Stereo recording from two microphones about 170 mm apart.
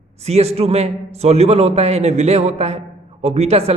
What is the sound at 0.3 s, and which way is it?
A man's voice, 40° right (ahead or behind).